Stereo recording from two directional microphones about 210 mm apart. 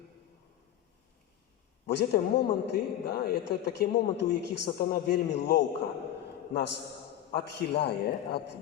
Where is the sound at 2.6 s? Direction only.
50° left (ahead or behind).